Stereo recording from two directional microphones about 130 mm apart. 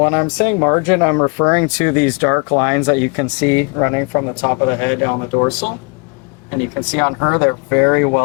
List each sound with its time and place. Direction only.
0.0 s speech: 25° left (ahead or behind)
6.7 s speech: 25° left (ahead or behind)